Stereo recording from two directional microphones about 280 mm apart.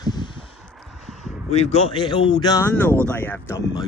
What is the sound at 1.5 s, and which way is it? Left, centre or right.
Speech, left.